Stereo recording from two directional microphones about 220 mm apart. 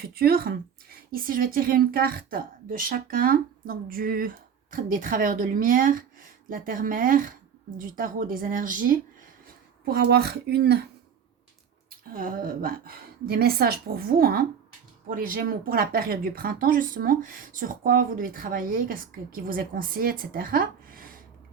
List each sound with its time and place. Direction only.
0.0 s a woman's voice: 45° right (ahead or behind)
12.1 s a woman's voice: 40° right (ahead or behind)